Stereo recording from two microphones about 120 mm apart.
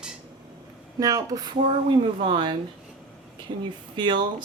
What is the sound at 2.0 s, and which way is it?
Speech, 45° right (ahead or behind).